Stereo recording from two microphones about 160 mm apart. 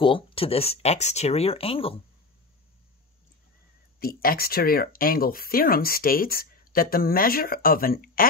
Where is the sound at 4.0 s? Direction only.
70° left (ahead or behind).